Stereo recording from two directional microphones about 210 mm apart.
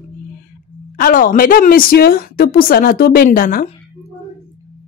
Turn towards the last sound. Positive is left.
turn(degrees=40)  # may be behind; listen again after turning